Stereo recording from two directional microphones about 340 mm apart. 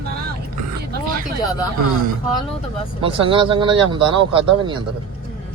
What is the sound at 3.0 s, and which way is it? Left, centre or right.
Speech, centre.